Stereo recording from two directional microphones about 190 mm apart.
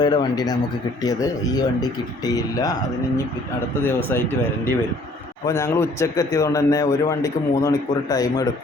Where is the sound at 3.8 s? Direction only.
10° left (ahead or behind).